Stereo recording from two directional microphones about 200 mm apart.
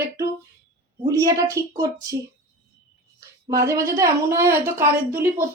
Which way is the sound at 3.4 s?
15° right (ahead or behind).